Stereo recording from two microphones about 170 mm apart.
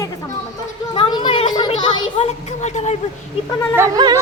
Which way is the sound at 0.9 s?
30° left (ahead or behind).